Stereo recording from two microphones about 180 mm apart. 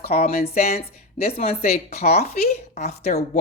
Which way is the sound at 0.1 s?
40° left (ahead or behind).